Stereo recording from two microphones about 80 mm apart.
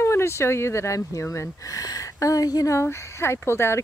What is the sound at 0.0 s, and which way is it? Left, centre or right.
Speech, left.